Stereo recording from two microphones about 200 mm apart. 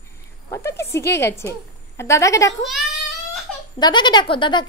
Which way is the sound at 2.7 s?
Centre (ahead or behind).